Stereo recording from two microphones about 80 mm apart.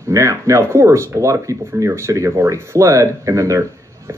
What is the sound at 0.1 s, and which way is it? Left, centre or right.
Speech, right.